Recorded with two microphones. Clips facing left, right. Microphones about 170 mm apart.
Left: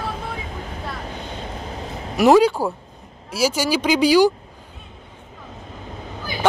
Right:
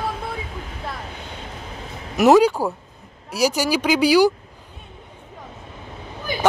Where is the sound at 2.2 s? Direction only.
10° right (ahead or behind).